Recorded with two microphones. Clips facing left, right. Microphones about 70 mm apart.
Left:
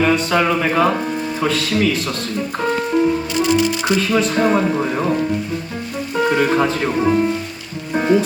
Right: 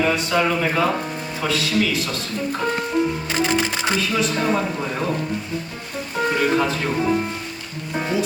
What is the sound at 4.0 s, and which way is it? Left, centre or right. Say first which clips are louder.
Speech: left 7 dB; left.